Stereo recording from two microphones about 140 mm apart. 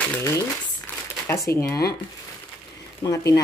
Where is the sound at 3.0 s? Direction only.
25° left (ahead or behind).